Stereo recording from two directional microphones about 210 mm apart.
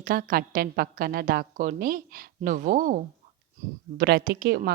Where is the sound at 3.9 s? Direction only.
50° right (ahead or behind).